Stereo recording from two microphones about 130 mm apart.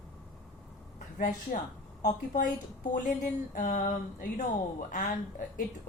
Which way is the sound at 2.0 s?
75° left (ahead or behind).